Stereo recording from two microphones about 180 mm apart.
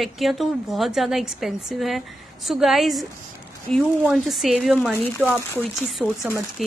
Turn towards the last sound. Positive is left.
turn(degrees=0)  # may be behind; listen again after turning